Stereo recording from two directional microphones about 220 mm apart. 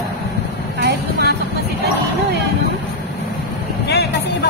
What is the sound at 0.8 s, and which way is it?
Vehicle, 45° right (ahead or behind).